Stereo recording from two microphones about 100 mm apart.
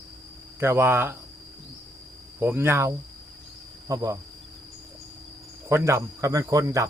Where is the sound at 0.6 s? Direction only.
25° right (ahead or behind).